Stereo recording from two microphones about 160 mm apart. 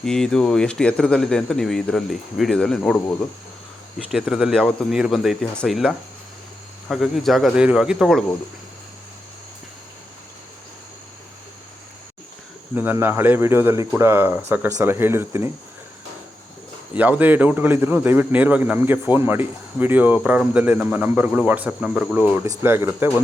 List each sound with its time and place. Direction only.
0.0 s speech: 5° left (ahead or behind)
12.7 s a man's voice: 15° right (ahead or behind)
16.9 s a man's voice: 10° right (ahead or behind)